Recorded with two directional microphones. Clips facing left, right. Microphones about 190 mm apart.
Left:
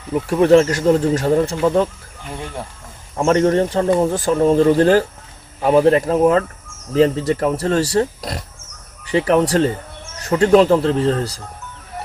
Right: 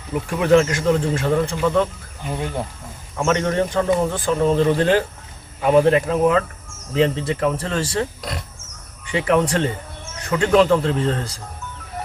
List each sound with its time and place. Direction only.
0.3 s speech: 35° left (ahead or behind)
3.2 s speech: 35° left (ahead or behind)